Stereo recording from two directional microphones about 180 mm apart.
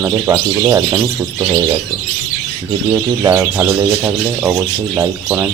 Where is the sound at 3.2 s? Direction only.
15° right (ahead or behind).